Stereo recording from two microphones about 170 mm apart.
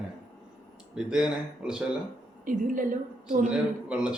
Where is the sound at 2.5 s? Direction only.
50° right (ahead or behind).